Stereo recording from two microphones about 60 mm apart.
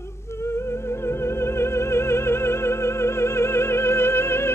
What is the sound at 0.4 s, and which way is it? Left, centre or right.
Music, left.